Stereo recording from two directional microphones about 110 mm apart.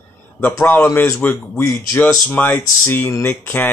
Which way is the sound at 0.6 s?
20° left (ahead or behind).